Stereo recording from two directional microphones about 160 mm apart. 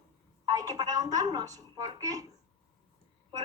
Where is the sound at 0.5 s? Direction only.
20° right (ahead or behind).